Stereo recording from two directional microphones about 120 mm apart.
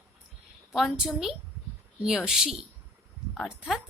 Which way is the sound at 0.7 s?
Centre (ahead or behind).